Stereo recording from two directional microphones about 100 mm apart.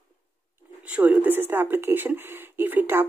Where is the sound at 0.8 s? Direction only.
15° right (ahead or behind).